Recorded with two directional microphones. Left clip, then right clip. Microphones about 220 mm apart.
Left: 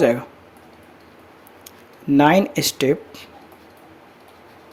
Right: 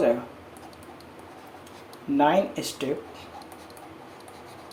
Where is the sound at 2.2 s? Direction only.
70° left (ahead or behind).